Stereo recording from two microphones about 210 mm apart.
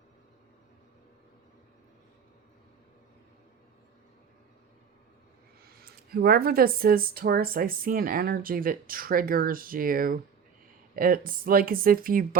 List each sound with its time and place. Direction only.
5.6 s speech: 45° right (ahead or behind)